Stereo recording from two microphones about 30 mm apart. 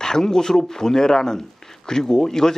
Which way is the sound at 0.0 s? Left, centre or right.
Centre.